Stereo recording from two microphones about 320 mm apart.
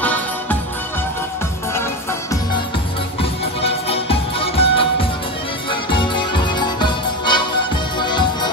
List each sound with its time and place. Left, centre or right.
0.0 s music: centre
3.2 s music: centre